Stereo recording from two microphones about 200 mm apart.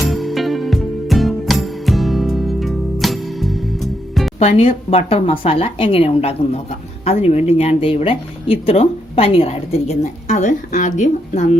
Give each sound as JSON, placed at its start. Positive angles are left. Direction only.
{"t": 0.1, "sound": "music", "side_deg": 0}
{"t": 4.4, "sound": "a woman's voice", "side_deg": 30}